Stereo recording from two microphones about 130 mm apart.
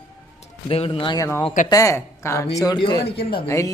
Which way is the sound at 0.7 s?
45° left (ahead or behind).